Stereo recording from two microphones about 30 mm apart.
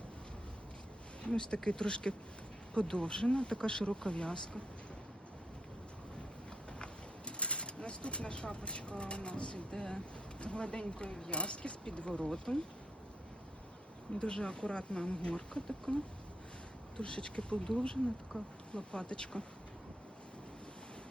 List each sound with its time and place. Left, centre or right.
1.2 s speech: left
6.7 s speech: left
9.7 s speech: left
14.2 s speech: left
17.0 s speech: left
18.3 s speech: left